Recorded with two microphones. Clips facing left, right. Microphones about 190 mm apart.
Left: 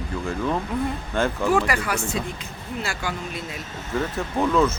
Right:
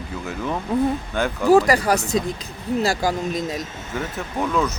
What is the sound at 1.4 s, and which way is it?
Speech, 40° right (ahead or behind).